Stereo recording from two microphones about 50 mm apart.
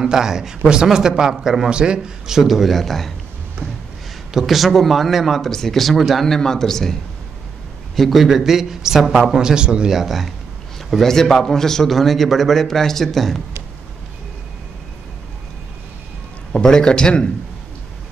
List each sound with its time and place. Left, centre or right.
0.0 s a man's voice: centre
1.7 s a man's voice: centre
4.3 s a man's voice: centre
6.2 s a man's voice: centre
9.9 s a man's voice: centre
10.9 s a man's voice: centre
16.6 s speech: centre